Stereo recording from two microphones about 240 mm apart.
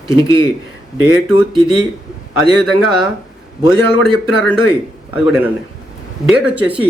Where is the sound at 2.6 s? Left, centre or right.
Centre.